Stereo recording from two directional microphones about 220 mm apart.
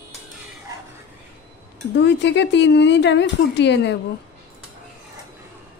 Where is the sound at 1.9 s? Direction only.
50° left (ahead or behind).